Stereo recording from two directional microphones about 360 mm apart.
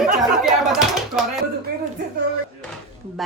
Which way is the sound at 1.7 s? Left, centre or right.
Right.